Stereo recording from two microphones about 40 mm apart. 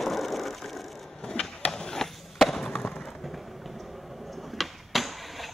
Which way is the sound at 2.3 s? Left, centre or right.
Centre.